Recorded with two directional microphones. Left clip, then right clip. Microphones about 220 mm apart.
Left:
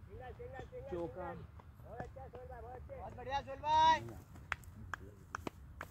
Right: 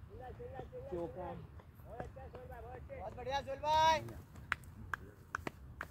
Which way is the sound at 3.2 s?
45° right (ahead or behind).